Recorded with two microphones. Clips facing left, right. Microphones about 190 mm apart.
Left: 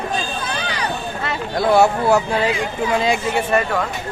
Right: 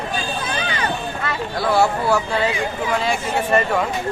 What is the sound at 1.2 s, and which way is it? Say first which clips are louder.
Speech: left 4 dB; 20° left (ahead or behind).